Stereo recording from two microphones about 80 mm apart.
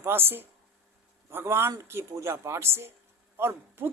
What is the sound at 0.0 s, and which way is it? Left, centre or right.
Speech, right.